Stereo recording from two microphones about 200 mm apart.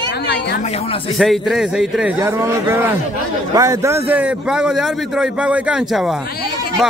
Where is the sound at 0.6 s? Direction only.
30° left (ahead or behind).